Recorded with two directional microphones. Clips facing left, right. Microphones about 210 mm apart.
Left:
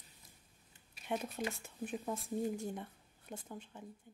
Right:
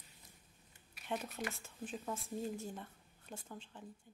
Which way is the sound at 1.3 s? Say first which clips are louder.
Left 3 dB; 15° left (ahead or behind).